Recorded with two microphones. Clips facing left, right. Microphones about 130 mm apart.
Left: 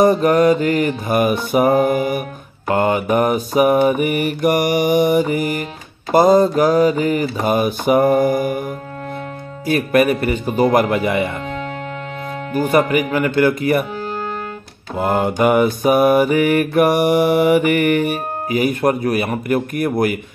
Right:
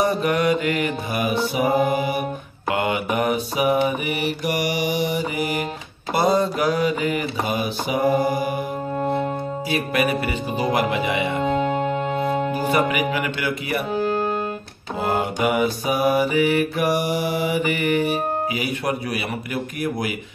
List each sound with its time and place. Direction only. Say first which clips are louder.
0.0 s mantra: left 7 dB; 40° left (ahead or behind)
9.7 s mantra: left 8 dB; 50° left (ahead or behind)
11.4 s music: right 5 dB; 25° right (ahead or behind)
12.5 s mantra: left 11 dB; 50° left (ahead or behind)
15.0 s mantra: left 5 dB; 50° left (ahead or behind)